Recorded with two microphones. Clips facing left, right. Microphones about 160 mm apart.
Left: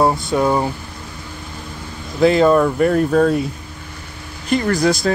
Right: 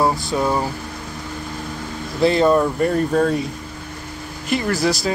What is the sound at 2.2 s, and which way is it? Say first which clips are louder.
Speech: left 3 dB; 5° left (ahead or behind).